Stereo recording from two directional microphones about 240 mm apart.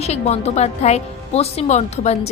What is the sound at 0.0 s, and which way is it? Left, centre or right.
A woman's voice, left.